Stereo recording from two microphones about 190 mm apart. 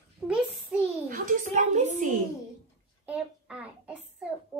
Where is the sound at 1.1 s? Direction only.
45° right (ahead or behind).